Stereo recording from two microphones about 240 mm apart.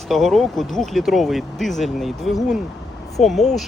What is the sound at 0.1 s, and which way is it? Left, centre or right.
Speech, centre.